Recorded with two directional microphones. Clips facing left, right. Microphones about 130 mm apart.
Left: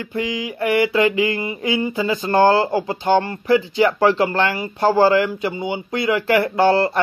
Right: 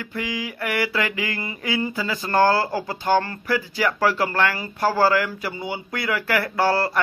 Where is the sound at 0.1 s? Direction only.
25° left (ahead or behind).